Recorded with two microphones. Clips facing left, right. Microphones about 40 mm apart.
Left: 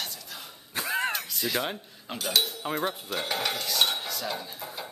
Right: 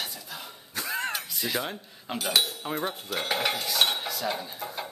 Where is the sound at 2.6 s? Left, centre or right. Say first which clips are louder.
Left 1 dB; centre.